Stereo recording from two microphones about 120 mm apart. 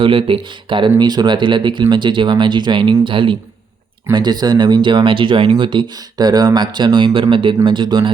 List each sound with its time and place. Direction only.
0.0 s speech: 45° right (ahead or behind)